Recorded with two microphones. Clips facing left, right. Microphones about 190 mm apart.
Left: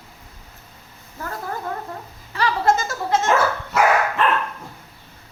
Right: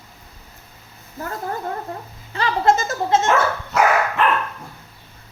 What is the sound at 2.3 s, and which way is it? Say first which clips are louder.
Speech: right 1 dB; 25° right (ahead or behind).